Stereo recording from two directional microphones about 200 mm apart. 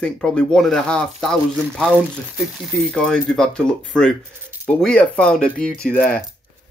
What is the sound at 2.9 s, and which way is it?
Speech, 5° left (ahead or behind).